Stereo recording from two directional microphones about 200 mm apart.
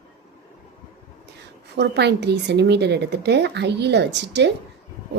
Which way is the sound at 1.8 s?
55° right (ahead or behind).